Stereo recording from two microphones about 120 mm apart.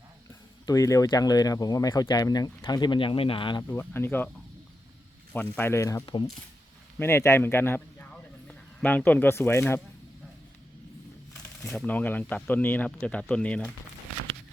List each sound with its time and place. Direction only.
0.6 s speech: 30° left (ahead or behind); by 3.6 s 45° left (ahead or behind)
3.6 s speech: 20° left (ahead or behind)
5.3 s speech: 15° left (ahead or behind)
7.0 s speech: 20° left (ahead or behind)
11.6 s speech: 5° left (ahead or behind)